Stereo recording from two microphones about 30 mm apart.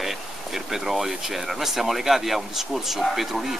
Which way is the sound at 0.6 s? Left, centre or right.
Centre.